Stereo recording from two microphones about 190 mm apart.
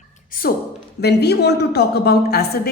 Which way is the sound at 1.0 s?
60° left (ahead or behind).